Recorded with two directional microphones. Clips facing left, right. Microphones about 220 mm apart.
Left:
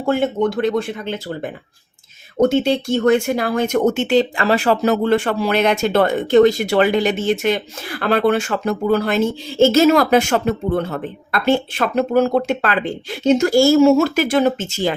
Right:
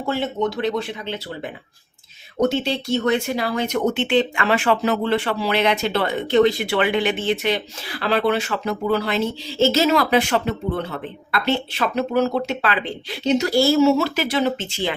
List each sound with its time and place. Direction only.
0.0 s speech: 50° left (ahead or behind)